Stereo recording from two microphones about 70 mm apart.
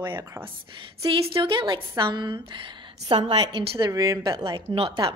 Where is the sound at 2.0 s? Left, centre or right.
Right.